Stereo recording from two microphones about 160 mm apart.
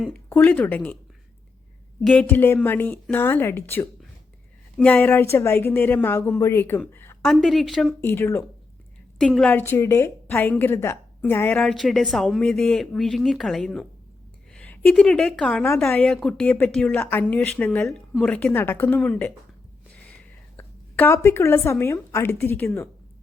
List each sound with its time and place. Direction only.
0.3 s speech: 10° left (ahead or behind)
2.0 s speech: 10° left (ahead or behind)
7.4 s a woman's voice: centre (ahead or behind)
8.0 s speech: 15° left (ahead or behind)
9.1 s a woman's voice: 5° left (ahead or behind)
15.6 s speech: 15° left (ahead or behind)
19.9 s a sound: 10° left (ahead or behind)
22.1 s speech: 15° left (ahead or behind)